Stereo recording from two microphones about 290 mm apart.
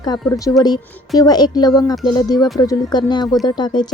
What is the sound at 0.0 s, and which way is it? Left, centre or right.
Speech, centre.